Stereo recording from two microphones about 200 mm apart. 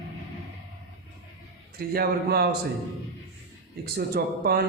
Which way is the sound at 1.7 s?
50° right (ahead or behind).